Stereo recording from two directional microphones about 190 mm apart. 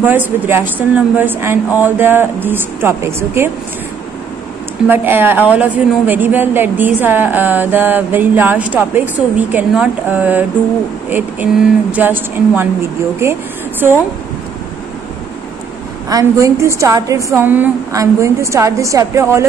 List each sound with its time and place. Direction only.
0.0 s a woman's voice: 10° right (ahead or behind)
4.8 s a woman's voice: 10° right (ahead or behind)
16.1 s a woman's voice: 20° right (ahead or behind)